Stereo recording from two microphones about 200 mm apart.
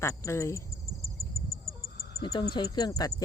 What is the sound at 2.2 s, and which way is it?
Speech, 25° left (ahead or behind).